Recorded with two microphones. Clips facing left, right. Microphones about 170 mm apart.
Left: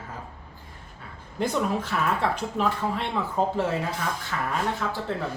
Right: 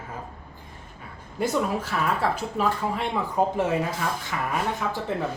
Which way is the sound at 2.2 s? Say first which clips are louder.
Right 1 dB; 10° right (ahead or behind).